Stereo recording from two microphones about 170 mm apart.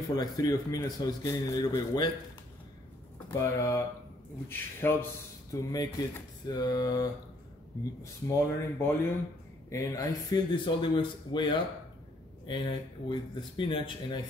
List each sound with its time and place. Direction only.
0.1 s a man's voice: 20° left (ahead or behind)
3.3 s a man's voice: 15° left (ahead or behind)